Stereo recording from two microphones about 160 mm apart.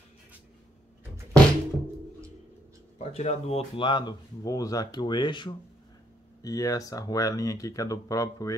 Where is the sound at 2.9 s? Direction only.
45° left (ahead or behind).